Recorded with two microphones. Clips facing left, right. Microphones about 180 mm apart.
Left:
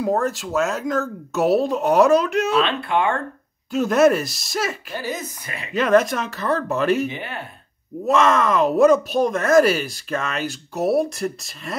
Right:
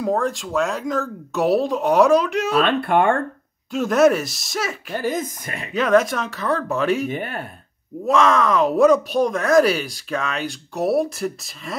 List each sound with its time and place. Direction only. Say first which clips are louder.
0.0 s speech: even; 5° left (ahead or behind)
2.6 s speech: right 3 dB; 55° right (ahead or behind)
3.7 s speech: even; centre (ahead or behind)
4.9 s speech: right 5 dB; 50° right (ahead or behind)
5.7 s speech: even; centre (ahead or behind)
7.1 s speech: right 4 dB; 50° right (ahead or behind)
8.1 s speech: even; centre (ahead or behind)